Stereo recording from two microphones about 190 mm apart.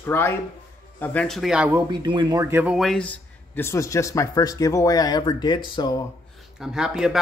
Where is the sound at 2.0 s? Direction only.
25° right (ahead or behind); by 6.0 s 25° left (ahead or behind).